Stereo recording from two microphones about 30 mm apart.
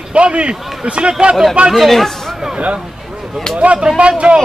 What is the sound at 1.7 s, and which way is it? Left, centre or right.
Speech, centre.